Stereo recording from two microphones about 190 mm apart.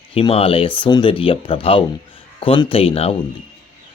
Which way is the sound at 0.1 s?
30° left (ahead or behind).